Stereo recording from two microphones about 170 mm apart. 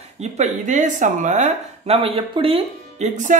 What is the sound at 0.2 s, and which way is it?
Speech, 45° right (ahead or behind).